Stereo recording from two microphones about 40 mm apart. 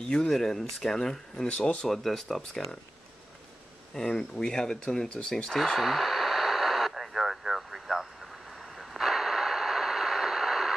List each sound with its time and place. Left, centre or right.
0.3 s speech: centre
1.9 s speech: centre
3.9 s speech: centre
5.6 s radio: centre